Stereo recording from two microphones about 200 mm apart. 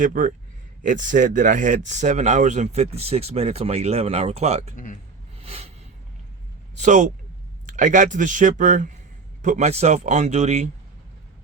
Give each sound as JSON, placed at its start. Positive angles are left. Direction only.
{"t": 0.0, "sound": "speech", "side_deg": -40}
{"t": 5.4, "sound": "a sound", "side_deg": -30}
{"t": 6.7, "sound": "speech", "side_deg": -40}